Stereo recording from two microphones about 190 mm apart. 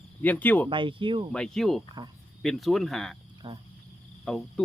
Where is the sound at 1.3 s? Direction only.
5° left (ahead or behind).